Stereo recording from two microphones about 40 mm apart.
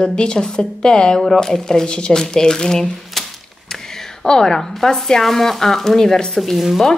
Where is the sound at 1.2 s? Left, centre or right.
Centre.